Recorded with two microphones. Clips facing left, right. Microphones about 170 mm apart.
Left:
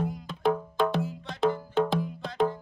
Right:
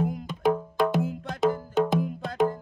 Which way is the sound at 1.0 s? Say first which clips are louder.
Right 4 dB; 50° right (ahead or behind).